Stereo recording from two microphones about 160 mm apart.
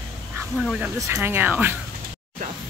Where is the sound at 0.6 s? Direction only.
Centre (ahead or behind).